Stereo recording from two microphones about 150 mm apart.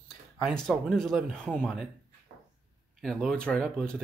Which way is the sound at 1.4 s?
10° left (ahead or behind).